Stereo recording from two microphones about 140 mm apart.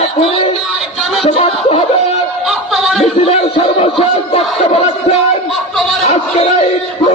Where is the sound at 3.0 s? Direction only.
45° left (ahead or behind).